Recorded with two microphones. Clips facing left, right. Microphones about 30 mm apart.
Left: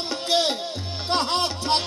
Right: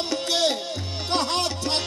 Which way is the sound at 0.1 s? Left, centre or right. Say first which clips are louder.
Left 1 dB; centre.